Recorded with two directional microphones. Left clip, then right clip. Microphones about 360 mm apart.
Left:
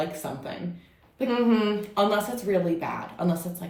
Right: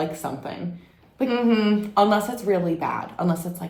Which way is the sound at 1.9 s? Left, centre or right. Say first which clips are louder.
Right 6 dB; centre.